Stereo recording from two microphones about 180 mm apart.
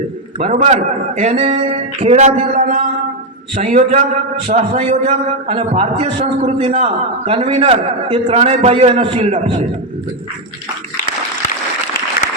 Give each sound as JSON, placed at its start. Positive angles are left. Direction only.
{"t": 0.3, "sound": "a man's voice", "side_deg": -40}